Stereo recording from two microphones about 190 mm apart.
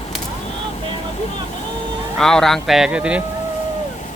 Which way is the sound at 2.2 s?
Centre (ahead or behind).